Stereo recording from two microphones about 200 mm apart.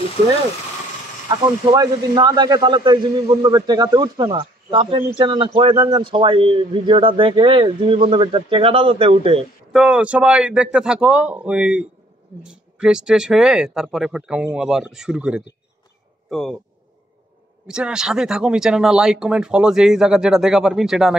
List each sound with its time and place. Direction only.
1.3 s speech: 20° right (ahead or behind)
9.7 s speech: 5° right (ahead or behind)
17.6 s speech: 5° right (ahead or behind)